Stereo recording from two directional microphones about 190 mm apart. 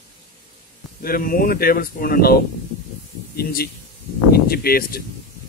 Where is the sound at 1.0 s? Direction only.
50° left (ahead or behind).